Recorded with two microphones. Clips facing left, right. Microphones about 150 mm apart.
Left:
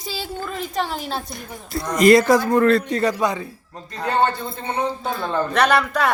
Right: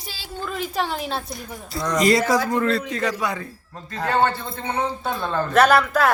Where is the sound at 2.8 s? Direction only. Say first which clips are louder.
Left 4 dB; 35° left (ahead or behind).